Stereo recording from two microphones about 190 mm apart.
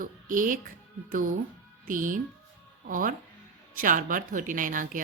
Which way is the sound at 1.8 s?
45° right (ahead or behind).